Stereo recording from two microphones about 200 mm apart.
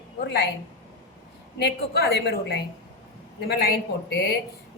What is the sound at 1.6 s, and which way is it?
A woman's voice, 55° left (ahead or behind).